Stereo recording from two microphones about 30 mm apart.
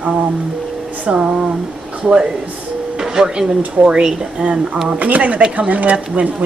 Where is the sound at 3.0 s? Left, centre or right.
Right.